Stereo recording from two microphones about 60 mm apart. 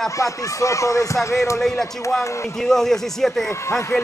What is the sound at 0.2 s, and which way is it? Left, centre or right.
Speech, left.